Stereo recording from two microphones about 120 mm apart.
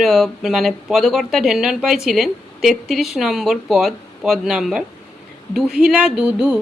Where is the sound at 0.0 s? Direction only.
Centre (ahead or behind).